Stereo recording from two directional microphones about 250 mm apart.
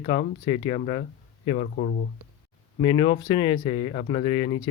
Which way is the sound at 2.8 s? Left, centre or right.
Centre.